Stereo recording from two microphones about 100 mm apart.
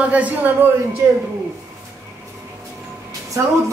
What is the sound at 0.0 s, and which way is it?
Speech, 15° right (ahead or behind).